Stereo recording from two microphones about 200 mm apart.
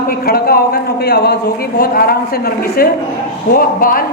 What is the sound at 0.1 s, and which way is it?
A woman's voice, 50° left (ahead or behind).